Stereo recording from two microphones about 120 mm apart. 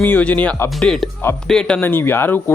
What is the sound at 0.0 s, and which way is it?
Speech, 15° left (ahead or behind).